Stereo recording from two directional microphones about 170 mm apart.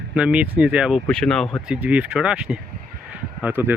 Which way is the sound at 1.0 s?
5° left (ahead or behind).